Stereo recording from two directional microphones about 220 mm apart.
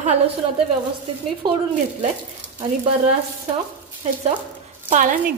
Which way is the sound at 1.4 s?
20° right (ahead or behind).